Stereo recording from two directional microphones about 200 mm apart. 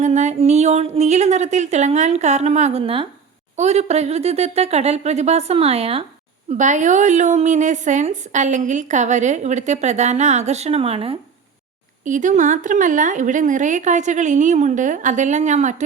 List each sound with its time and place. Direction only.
0.0 s a woman's voice: 35° right (ahead or behind)
12.0 s a woman's voice: 40° right (ahead or behind)